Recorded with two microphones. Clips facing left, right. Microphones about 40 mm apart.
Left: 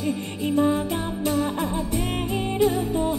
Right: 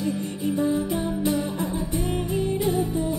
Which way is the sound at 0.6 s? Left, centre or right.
Left.